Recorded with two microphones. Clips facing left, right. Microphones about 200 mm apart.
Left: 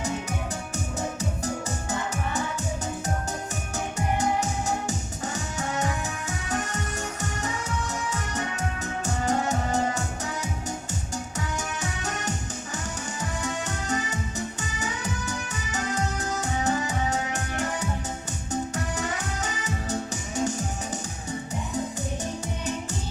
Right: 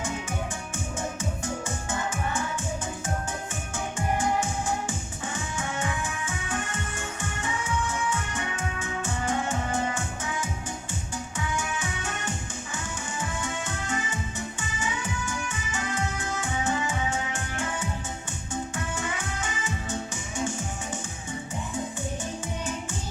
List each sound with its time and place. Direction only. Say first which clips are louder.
4.9 s music: left 3 dB; 40° left (ahead or behind)
13.4 s music: left 2 dB; 40° left (ahead or behind)